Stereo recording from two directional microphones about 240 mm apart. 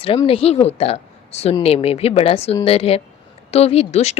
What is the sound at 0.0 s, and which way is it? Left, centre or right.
Speech, left.